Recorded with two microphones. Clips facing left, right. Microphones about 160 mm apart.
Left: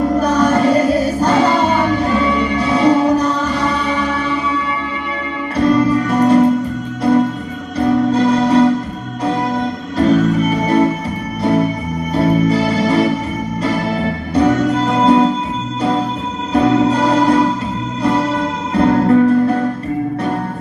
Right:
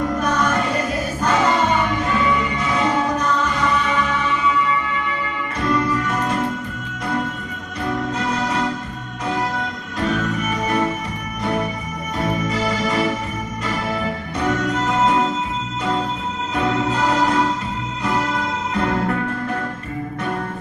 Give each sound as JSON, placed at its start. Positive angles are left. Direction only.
{"t": 0.2, "sound": "music", "side_deg": 35}
{"t": 5.5, "sound": "music", "side_deg": 35}
{"t": 12.1, "sound": "music", "side_deg": 35}
{"t": 14.3, "sound": "music", "side_deg": 35}